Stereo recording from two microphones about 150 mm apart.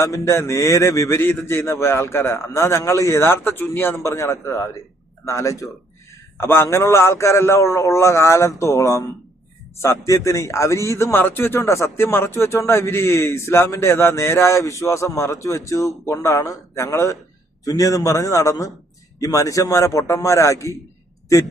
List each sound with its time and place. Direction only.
0.0 s a man's voice: 20° left (ahead or behind)